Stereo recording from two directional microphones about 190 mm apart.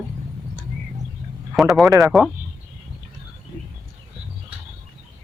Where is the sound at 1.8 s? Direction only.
20° right (ahead or behind).